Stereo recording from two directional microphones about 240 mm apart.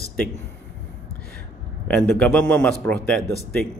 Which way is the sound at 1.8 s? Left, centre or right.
Centre.